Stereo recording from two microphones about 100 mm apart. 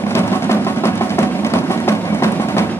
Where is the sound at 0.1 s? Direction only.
25° left (ahead or behind).